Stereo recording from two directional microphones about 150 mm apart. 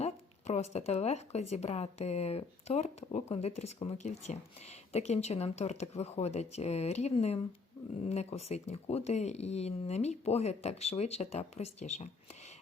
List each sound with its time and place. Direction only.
0.0 s speech: 50° left (ahead or behind)